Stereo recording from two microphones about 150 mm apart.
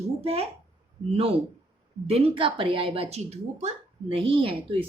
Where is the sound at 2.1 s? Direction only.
40° right (ahead or behind).